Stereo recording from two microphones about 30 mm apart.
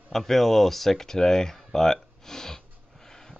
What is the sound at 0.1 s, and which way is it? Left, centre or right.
Speech, centre.